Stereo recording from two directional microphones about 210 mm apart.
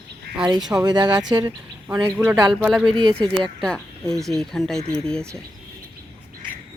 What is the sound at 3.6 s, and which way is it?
Speech, centre (ahead or behind).